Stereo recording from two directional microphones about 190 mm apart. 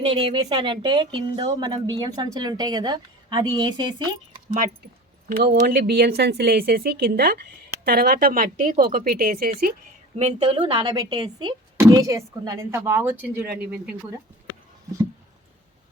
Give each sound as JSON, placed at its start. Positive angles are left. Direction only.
{"t": 0.0, "sound": "speech", "side_deg": -30}
{"t": 5.6, "sound": "a woman's voice", "side_deg": -55}
{"t": 10.2, "sound": "speech", "side_deg": -30}